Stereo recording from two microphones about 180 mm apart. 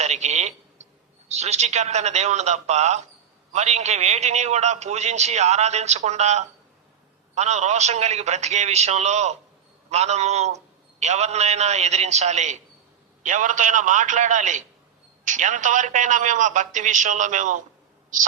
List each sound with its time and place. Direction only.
0.0 s telephone: 40° right (ahead or behind)
1.3 s a man's voice: 40° right (ahead or behind)